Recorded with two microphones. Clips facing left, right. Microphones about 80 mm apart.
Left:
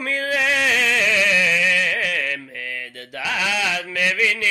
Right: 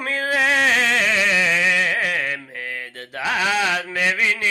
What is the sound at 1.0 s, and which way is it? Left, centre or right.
Music, right.